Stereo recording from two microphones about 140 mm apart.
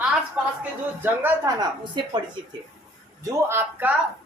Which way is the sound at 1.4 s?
30° right (ahead or behind).